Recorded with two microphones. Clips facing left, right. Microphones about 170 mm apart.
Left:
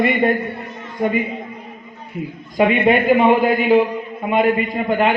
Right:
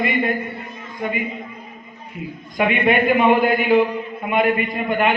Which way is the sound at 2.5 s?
25° left (ahead or behind).